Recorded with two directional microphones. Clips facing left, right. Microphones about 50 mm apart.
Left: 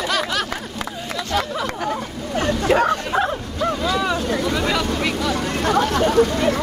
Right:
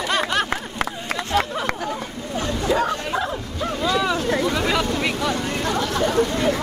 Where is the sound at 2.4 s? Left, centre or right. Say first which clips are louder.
Left 4 dB; left.